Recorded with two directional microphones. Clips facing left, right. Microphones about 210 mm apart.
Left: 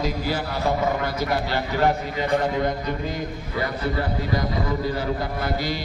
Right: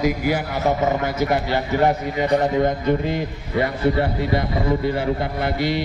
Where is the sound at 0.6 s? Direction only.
20° right (ahead or behind).